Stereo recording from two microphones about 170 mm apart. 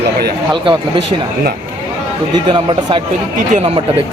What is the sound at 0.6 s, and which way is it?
Speech, 30° right (ahead or behind).